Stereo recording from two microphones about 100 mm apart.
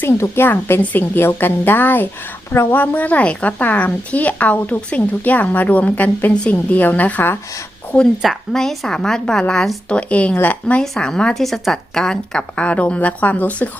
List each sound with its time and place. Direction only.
0.0 s a woman's voice: 25° left (ahead or behind)
8.2 s a woman's voice: 5° left (ahead or behind)